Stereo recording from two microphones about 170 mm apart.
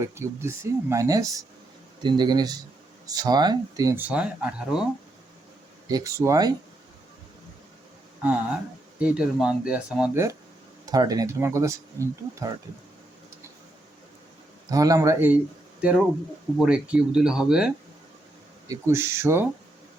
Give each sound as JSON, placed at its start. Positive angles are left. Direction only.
{"t": 0.0, "sound": "speech", "side_deg": -15}
{"t": 5.9, "sound": "speech", "side_deg": -20}
{"t": 9.0, "sound": "speech", "side_deg": -5}
{"t": 10.8, "sound": "speech", "side_deg": -20}
{"t": 14.7, "sound": "speech", "side_deg": -20}
{"t": 18.7, "sound": "speech", "side_deg": -15}